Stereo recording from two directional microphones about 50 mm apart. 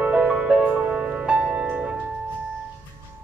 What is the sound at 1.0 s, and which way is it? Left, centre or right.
Music, right.